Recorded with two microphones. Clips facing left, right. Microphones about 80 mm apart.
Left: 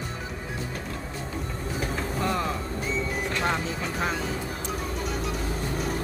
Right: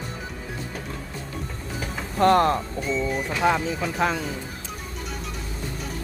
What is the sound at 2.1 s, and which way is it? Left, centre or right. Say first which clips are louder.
Speech: right 12 dB; right.